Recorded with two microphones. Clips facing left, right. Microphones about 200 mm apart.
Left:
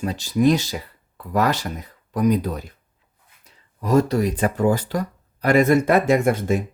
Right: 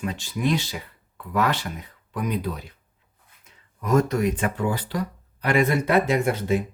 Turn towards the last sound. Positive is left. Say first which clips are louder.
# left 3 dB
turn(degrees=45)  # may be behind; listen again after turning